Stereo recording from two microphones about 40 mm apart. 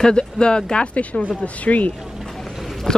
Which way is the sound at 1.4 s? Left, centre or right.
Left.